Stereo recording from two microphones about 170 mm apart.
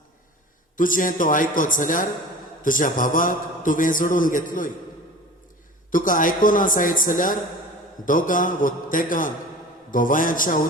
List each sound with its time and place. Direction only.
0.8 s a man's voice: 55° left (ahead or behind)
5.9 s a man's voice: 50° left (ahead or behind)